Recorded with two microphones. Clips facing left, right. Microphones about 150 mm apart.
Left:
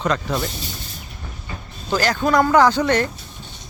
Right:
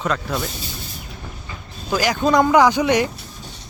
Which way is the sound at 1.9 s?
15° right (ahead or behind).